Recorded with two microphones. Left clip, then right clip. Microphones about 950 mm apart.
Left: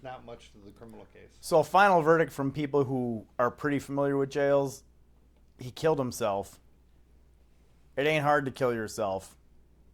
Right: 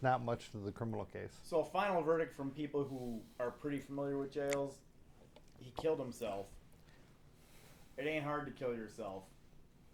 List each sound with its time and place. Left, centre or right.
0.0 s speech: right
1.5 s speech: left
7.9 s speech: left